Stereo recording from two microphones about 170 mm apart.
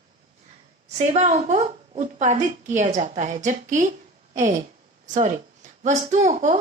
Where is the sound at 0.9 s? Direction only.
40° right (ahead or behind).